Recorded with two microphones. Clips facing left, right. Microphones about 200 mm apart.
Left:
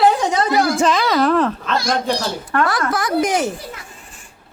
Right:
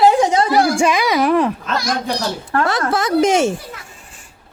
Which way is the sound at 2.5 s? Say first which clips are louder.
Right 1 dB; 25° right (ahead or behind).